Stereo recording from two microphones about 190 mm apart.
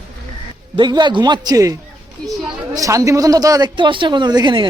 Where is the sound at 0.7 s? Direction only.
25° right (ahead or behind).